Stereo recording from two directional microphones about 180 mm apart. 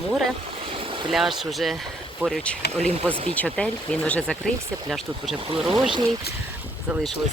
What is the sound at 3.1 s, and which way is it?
Speech, 35° right (ahead or behind).